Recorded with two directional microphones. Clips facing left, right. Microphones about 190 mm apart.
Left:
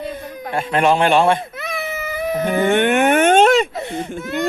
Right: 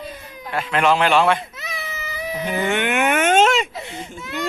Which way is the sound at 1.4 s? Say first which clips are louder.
Left 6 dB; 55° left (ahead or behind).